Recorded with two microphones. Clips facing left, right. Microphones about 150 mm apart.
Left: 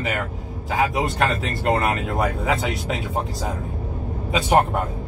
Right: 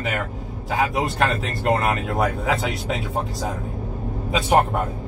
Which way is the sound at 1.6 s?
Centre (ahead or behind).